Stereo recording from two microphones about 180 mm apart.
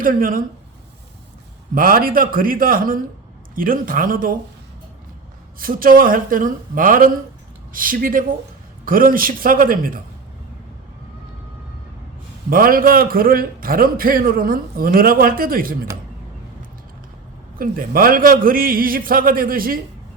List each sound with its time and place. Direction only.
0.0 s a man's voice: 50° right (ahead or behind)
1.7 s a man's voice: 55° right (ahead or behind)
5.5 s a man's voice: 50° right (ahead or behind)
12.5 s a man's voice: 50° right (ahead or behind)
17.6 s a man's voice: 55° right (ahead or behind)